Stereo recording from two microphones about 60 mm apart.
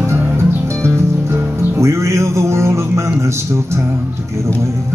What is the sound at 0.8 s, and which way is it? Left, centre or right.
Music, right.